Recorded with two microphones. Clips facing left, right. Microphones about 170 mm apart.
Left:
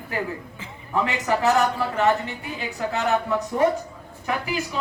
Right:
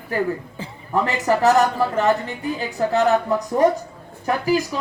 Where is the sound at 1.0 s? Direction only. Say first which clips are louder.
Right 4 dB; 40° right (ahead or behind).